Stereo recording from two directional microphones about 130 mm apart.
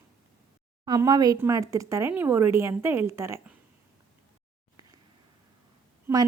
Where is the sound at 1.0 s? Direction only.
30° right (ahead or behind).